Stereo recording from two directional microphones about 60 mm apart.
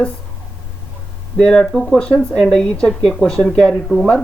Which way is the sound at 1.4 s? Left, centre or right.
Centre.